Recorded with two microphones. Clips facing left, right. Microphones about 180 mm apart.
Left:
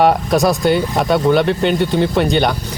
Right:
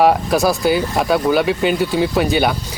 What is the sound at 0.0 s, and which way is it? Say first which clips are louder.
Speech: left 1 dB; centre (ahead or behind).